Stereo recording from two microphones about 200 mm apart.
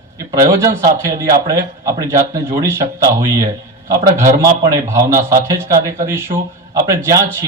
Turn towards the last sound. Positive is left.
turn(degrees=-15)  # may be behind; listen again after turning